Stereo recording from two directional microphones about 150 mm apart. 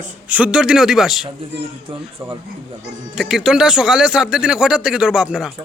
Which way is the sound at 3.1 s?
Centre (ahead or behind).